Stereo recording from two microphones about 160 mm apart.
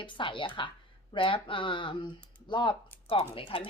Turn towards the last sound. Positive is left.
turn(degrees=35)  # may be behind; listen again after turning